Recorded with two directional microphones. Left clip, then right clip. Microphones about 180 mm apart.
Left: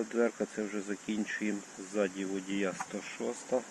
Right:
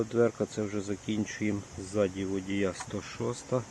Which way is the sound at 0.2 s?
5° right (ahead or behind).